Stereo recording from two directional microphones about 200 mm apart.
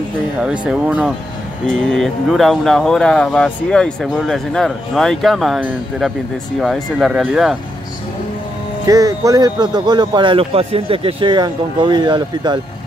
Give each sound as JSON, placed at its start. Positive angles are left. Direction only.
{"t": 0.4, "sound": "speech", "side_deg": -5}
{"t": 8.8, "sound": "speech", "side_deg": -15}